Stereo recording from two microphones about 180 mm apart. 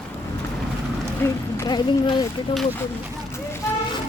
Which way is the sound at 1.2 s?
20° left (ahead or behind).